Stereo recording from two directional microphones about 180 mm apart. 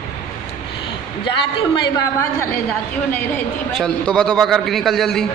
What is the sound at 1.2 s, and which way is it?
Speech, 25° left (ahead or behind).